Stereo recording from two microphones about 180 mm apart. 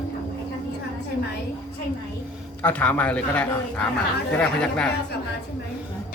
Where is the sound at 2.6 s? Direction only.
10° left (ahead or behind).